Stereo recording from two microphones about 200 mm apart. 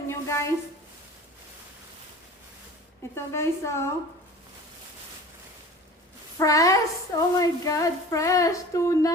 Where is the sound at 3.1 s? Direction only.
15° left (ahead or behind).